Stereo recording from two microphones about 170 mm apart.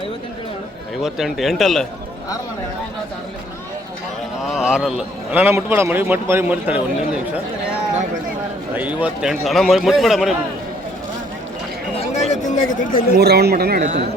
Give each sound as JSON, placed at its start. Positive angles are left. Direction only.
{"t": 1.0, "sound": "a man's voice", "side_deg": 0}
{"t": 4.4, "sound": "a man's voice", "side_deg": -5}
{"t": 8.7, "sound": "a man's voice", "side_deg": -10}
{"t": 11.9, "sound": "a sound", "side_deg": 40}
{"t": 12.6, "sound": "speech", "side_deg": 30}
{"t": 13.1, "sound": "speech", "side_deg": -70}